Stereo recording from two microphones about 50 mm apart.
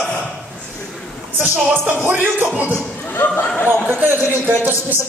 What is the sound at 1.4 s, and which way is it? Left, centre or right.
Music, right.